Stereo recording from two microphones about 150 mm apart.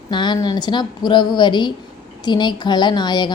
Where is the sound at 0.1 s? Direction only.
30° left (ahead or behind).